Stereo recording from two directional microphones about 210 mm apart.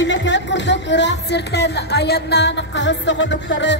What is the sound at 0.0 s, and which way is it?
A woman's voice, 60° left (ahead or behind).